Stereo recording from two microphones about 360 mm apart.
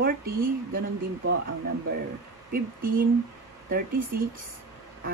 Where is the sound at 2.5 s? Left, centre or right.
Right.